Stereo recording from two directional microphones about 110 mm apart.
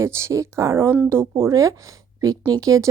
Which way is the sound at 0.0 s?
25° right (ahead or behind).